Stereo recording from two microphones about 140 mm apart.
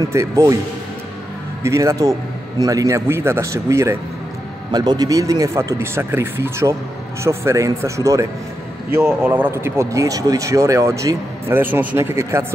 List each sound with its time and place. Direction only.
0.0 s speech: 20° right (ahead or behind)
1.6 s speech: 20° right (ahead or behind)